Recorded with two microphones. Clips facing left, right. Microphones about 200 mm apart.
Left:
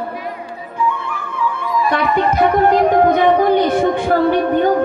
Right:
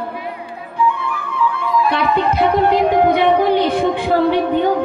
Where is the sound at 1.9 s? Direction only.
50° left (ahead or behind).